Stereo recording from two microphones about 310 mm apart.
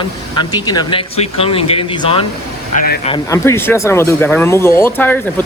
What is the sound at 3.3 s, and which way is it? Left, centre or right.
Speech, centre.